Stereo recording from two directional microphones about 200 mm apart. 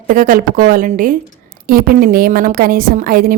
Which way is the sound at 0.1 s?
45° right (ahead or behind).